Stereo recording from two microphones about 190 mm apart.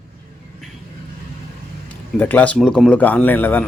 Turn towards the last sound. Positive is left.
turn(degrees=10)  # may be behind; listen again after turning